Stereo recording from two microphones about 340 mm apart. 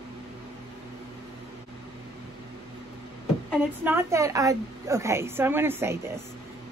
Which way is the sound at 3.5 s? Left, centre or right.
Centre.